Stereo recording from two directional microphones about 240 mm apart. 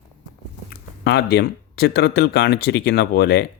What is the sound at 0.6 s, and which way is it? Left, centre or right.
Speech, left.